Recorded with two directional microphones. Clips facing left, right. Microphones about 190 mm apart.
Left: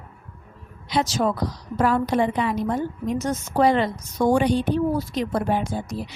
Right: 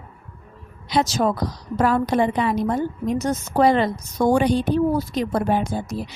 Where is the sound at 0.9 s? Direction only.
40° right (ahead or behind).